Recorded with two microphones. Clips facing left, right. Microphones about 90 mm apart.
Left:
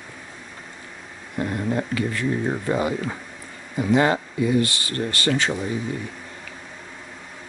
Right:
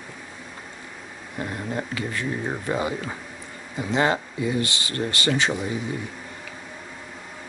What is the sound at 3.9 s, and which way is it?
Speech, 25° right (ahead or behind).